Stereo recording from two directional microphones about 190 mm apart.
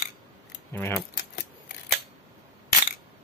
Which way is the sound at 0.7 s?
10° left (ahead or behind).